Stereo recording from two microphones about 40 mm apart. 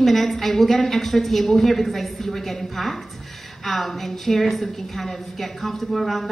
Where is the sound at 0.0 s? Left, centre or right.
Centre.